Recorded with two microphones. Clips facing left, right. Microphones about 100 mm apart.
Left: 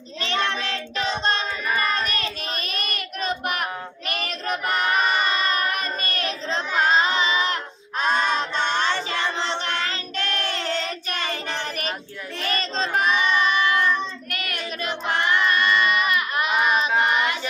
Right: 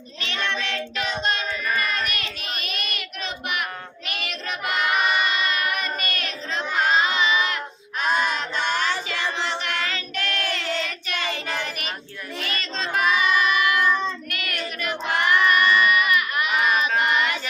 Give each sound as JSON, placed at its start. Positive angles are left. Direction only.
{"t": 0.2, "sound": "child singing", "side_deg": 35}